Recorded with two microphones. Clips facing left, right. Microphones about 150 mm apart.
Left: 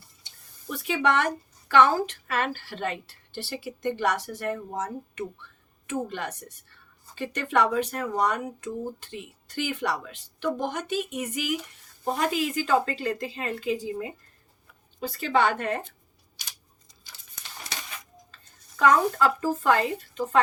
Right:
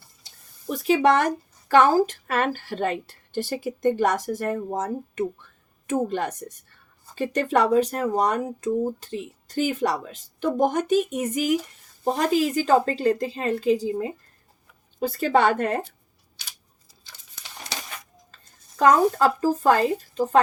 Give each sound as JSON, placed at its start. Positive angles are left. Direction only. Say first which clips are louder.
{"t": 0.3, "sound": "a woman's voice", "louder": "right 6 dB", "side_deg": -40}
{"t": 17.7, "sound": "a sound", "louder": "right 4 dB", "side_deg": -40}
{"t": 18.8, "sound": "a woman's voice", "louder": "right 3 dB", "side_deg": -35}